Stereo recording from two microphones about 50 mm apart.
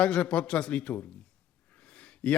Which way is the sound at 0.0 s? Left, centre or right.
Left.